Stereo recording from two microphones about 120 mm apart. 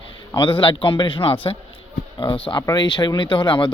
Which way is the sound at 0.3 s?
45° left (ahead or behind).